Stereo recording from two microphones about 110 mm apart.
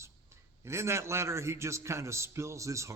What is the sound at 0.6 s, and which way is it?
A man's voice, 25° right (ahead or behind).